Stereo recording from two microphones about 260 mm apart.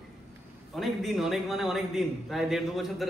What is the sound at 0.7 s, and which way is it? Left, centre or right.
A man's voice, centre.